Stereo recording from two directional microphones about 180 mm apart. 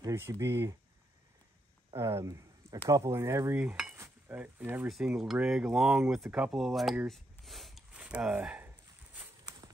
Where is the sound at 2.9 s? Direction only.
20° right (ahead or behind).